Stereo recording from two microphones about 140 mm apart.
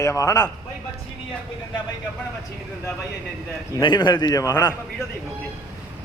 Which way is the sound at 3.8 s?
30° left (ahead or behind).